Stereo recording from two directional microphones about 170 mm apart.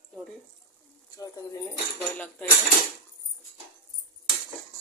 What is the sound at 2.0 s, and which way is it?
Speech, 10° left (ahead or behind).